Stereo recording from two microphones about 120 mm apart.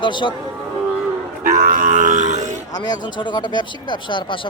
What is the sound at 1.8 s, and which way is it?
Grunt, 90° right.